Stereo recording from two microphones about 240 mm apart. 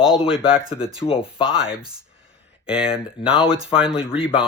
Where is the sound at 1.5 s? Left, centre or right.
Centre.